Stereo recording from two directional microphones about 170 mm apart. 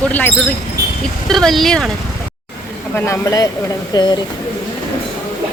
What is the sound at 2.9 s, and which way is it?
Speech, 15° left (ahead or behind).